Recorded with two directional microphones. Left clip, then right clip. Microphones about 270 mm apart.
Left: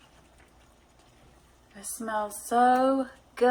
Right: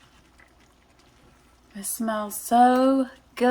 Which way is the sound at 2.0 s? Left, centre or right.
Right.